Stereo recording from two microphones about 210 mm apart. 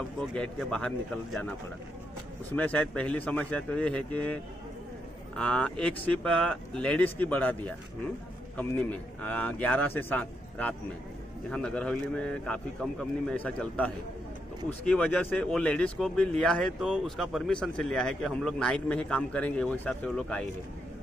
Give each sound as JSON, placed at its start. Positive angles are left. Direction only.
{"t": 0.3, "sound": "speech", "side_deg": 5}
{"t": 2.5, "sound": "a man's voice", "side_deg": 5}